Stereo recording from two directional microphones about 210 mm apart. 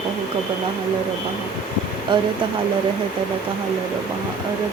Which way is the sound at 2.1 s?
25° right (ahead or behind).